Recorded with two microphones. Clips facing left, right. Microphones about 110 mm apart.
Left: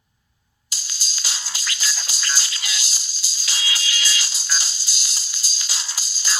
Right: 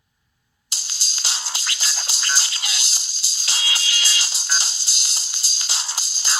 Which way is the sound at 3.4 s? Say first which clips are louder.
Even; 55° right (ahead or behind).